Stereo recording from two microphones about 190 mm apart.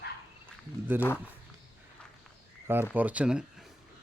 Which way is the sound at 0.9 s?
10° right (ahead or behind).